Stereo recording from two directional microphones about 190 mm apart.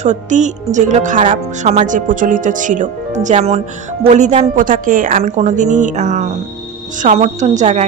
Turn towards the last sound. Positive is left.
turn(degrees=-40)  # may be behind; listen again after turning